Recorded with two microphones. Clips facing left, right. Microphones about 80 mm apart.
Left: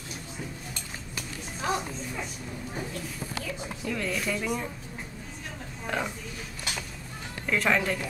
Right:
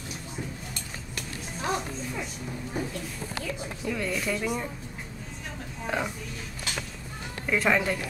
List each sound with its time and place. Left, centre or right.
1.6 s speech: centre
3.4 s speech: centre
5.9 s speech: centre
7.4 s speech: centre